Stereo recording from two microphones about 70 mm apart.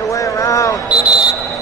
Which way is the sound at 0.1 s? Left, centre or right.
Left.